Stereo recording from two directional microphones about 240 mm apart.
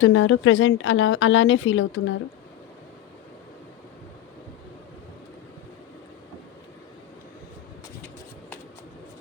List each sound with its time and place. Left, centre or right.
0.0 s a woman's voice: left